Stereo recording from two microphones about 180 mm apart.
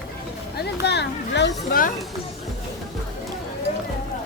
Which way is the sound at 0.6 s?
70° left (ahead or behind).